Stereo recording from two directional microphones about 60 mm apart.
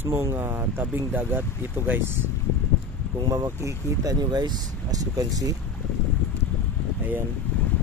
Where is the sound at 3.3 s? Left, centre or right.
Right.